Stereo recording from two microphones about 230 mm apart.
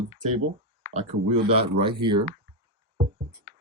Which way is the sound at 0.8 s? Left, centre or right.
Right.